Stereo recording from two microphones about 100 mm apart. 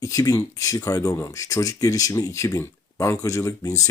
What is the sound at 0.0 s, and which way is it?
Speech, 35° left (ahead or behind).